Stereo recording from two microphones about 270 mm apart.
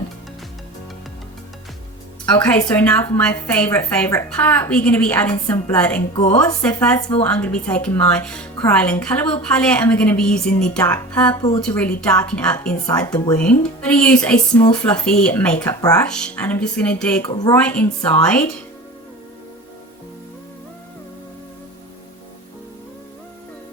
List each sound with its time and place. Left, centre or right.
2.4 s speech: centre
13.1 s speech: centre
13.6 s speech: centre